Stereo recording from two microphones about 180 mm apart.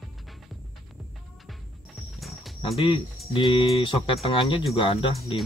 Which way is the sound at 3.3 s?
25° left (ahead or behind).